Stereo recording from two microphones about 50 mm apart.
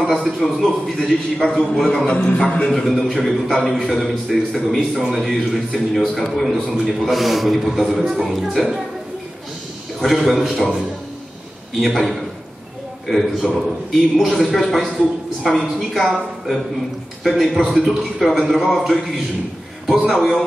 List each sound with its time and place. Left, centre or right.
0.1 s a man's voice: centre
2.2 s a man's voice: centre
2.7 s a man's voice: centre
10.1 s a man's voice: centre
11.8 s a man's voice: centre
19.9 s a man's voice: centre